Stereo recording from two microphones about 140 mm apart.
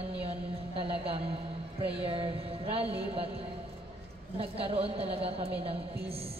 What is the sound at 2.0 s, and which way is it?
A woman's voice, 40° right (ahead or behind).